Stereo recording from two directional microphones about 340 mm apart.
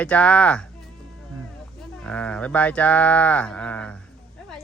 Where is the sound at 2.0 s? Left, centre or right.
Centre.